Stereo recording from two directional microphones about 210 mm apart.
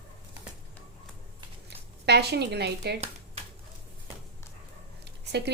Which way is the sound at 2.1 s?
50° right (ahead or behind).